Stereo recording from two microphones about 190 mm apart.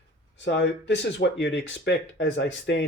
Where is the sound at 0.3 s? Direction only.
65° left (ahead or behind).